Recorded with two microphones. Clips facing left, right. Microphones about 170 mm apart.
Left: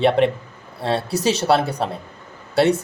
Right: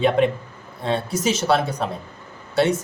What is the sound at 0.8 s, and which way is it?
A man's voice, 35° left (ahead or behind).